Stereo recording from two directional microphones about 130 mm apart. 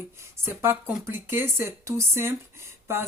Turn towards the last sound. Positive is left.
turn(degrees=-20)  # may be behind; listen again after turning